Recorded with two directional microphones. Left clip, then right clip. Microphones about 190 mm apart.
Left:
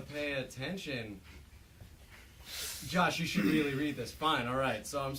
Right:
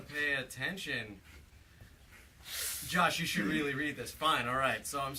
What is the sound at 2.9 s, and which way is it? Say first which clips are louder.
A man's voice: right 1 dB; 5° right (ahead or behind).